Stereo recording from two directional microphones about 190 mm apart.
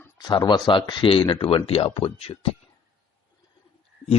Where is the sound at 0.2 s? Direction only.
25° left (ahead or behind).